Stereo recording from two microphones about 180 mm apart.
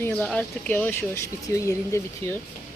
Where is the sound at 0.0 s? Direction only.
5° left (ahead or behind).